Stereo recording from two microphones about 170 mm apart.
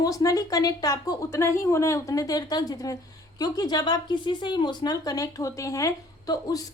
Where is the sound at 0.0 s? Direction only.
20° left (ahead or behind).